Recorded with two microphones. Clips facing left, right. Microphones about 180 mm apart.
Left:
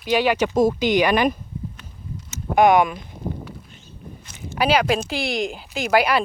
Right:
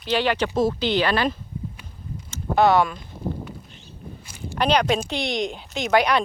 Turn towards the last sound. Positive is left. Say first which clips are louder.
# left 1 dB
turn(degrees=5)  # may be behind; listen again after turning